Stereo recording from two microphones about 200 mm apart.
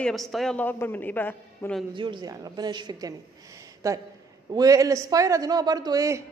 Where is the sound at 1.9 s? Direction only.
25° right (ahead or behind).